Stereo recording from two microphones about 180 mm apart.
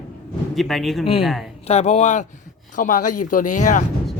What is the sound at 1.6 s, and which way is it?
Speech, 40° left (ahead or behind).